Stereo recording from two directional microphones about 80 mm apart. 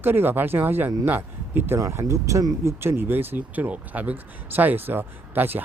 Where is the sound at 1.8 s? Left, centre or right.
Right.